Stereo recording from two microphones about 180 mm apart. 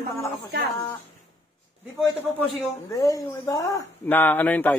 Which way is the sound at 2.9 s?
20° left (ahead or behind).